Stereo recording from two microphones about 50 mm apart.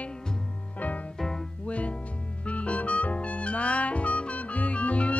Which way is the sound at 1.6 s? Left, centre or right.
Left.